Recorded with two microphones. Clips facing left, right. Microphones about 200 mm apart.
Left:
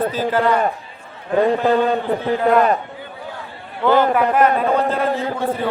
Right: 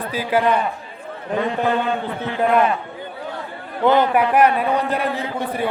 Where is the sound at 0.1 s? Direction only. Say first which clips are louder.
Left 1 dB; 10° right (ahead or behind).